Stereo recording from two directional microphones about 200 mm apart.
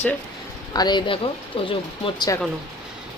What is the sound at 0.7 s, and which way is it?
Speech, 20° left (ahead or behind).